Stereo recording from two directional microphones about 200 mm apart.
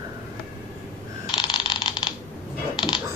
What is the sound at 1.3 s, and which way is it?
Typing, 25° left (ahead or behind).